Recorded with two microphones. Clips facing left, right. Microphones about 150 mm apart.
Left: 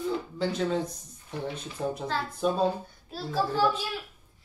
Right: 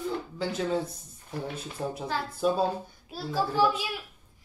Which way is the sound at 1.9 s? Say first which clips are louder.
Even; 10° right (ahead or behind).